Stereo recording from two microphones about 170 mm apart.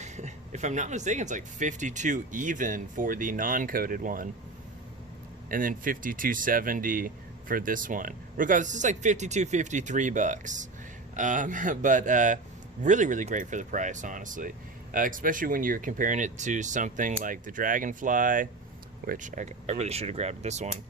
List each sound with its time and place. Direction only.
0.0 s speech: 45° right (ahead or behind)
5.5 s speech: 55° right (ahead or behind)